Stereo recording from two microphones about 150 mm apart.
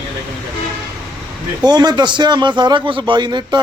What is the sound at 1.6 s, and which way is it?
A man's voice, 25° right (ahead or behind).